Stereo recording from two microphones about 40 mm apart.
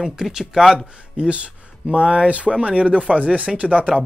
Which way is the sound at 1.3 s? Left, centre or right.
Right.